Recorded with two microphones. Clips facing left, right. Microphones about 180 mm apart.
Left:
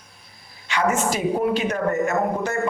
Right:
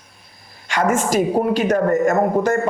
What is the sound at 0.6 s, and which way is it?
Speech, 45° right (ahead or behind).